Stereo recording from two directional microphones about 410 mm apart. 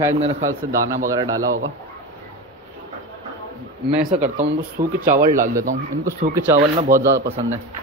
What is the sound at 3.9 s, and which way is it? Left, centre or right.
Speech, centre.